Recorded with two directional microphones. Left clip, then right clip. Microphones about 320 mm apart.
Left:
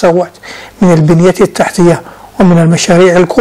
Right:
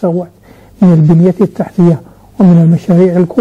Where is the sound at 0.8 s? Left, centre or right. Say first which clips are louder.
Left 3 dB; left.